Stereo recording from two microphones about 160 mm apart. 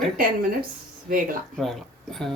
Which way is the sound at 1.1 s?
60° right (ahead or behind).